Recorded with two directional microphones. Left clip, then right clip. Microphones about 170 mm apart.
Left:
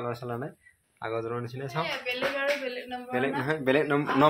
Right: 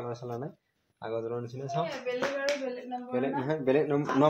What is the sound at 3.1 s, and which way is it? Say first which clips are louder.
Speech: left 2 dB; centre (ahead or behind).